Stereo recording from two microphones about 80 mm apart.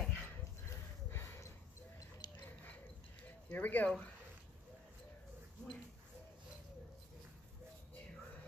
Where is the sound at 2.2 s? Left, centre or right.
Left.